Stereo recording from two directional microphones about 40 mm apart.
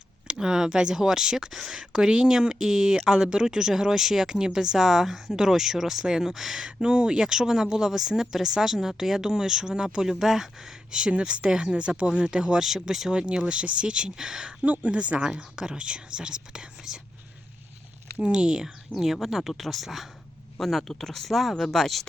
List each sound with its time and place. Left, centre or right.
0.3 s speech: centre
11.2 s speech: right
12.6 s speech: centre
13.1 s speech: right
14.6 s speech: right
15.2 s speech: right
18.2 s speech: right
18.9 s speech: centre